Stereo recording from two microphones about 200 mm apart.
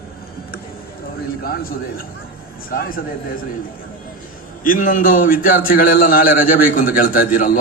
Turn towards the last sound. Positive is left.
turn(degrees=45)  # may be behind; listen again after turning